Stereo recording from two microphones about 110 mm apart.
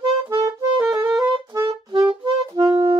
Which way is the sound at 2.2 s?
45° right (ahead or behind).